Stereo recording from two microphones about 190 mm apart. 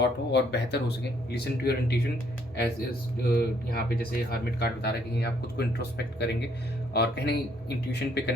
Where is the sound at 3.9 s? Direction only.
55° left (ahead or behind).